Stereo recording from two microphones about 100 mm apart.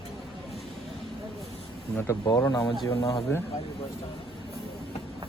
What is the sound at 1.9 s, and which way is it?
Speech, 30° left (ahead or behind).